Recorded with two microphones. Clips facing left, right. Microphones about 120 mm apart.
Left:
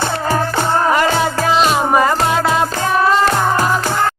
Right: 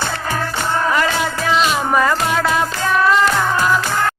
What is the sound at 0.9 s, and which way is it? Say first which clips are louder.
Music: left 3 dB; 40° left (ahead or behind).